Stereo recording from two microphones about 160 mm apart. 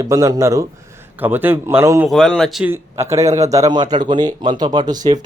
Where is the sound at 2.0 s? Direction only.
5° left (ahead or behind).